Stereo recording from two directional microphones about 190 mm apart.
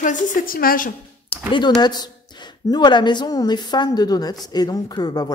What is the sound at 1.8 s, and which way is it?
A woman's voice, 20° left (ahead or behind).